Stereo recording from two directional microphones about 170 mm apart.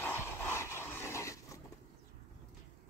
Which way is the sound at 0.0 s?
15° left (ahead or behind).